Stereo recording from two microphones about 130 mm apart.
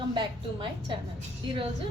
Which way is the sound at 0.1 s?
40° right (ahead or behind).